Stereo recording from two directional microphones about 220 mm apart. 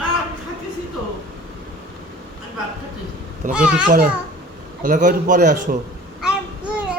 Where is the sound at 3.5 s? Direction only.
5° right (ahead or behind).